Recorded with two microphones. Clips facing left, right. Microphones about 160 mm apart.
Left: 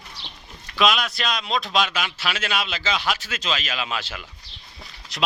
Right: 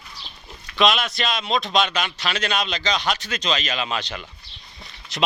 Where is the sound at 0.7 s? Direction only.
Centre (ahead or behind).